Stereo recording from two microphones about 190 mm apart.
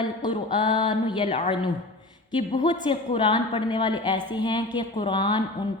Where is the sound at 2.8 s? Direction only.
25° left (ahead or behind).